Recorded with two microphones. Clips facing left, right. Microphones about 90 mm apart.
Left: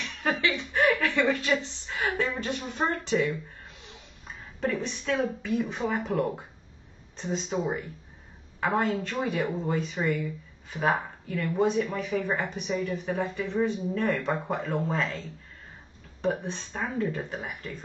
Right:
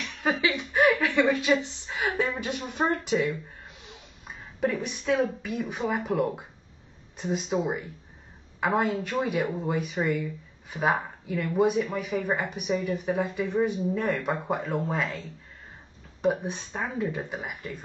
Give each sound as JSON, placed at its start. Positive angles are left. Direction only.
{"t": 0.0, "sound": "chuckle", "side_deg": -15}
{"t": 0.6, "sound": "a woman's voice", "side_deg": -15}